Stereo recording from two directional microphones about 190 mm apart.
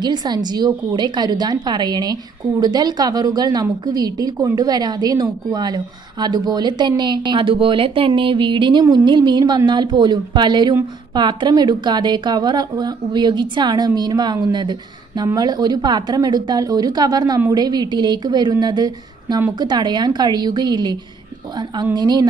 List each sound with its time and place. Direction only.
0.0 s a woman's voice: 20° right (ahead or behind)